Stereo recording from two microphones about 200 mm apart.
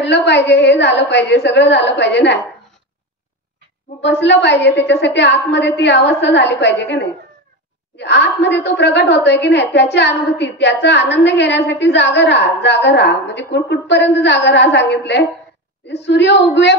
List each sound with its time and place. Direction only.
0.0 s a woman's voice: 60° left (ahead or behind)
4.0 s a woman's voice: 60° left (ahead or behind)